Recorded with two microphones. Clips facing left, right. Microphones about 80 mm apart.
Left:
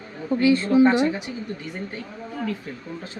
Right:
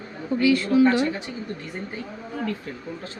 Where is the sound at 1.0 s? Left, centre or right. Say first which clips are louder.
Left 2 dB; centre.